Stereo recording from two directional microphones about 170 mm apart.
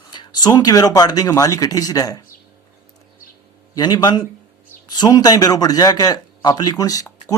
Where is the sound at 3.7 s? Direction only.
25° left (ahead or behind).